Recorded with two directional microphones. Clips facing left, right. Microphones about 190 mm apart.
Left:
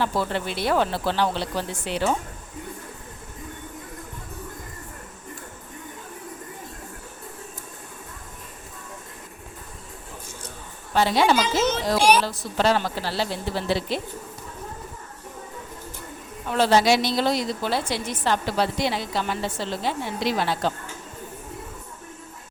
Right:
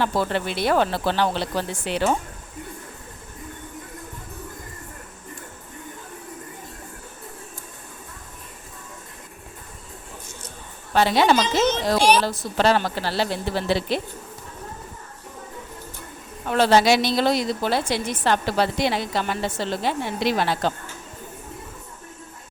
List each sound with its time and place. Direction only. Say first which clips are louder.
0.0 s a woman's voice: right 2 dB; 70° right (ahead or behind)
10.9 s a woman's voice: right 2 dB; 70° right (ahead or behind)
11.3 s speech: right 2 dB; 10° left (ahead or behind)
12.2 s a woman's voice: right 2 dB; 65° right (ahead or behind)
16.5 s a woman's voice: right 2 dB; 70° right (ahead or behind)